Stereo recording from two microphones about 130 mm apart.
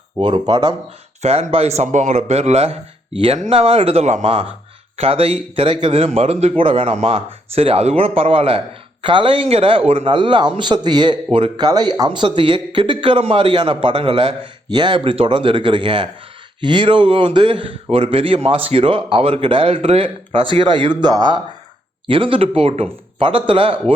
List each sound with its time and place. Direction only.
0.2 s speech: 35° right (ahead or behind)
1.2 s speech: 50° right (ahead or behind)